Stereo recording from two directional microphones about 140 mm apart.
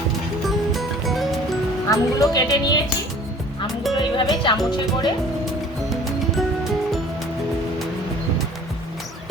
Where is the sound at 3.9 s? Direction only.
Centre (ahead or behind).